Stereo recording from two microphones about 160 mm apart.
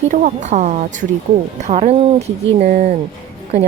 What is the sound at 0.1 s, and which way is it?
A woman's voice, 50° right (ahead or behind).